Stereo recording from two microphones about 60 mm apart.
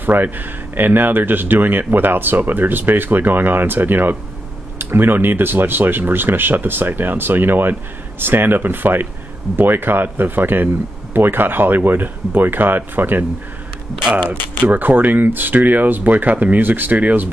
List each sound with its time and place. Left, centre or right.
0.0 s speech: right
14.2 s speech: left
14.7 s speech: right